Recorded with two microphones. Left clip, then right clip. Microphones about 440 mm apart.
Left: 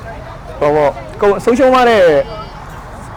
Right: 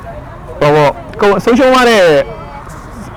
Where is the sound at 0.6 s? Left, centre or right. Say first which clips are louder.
Right 3 dB; right.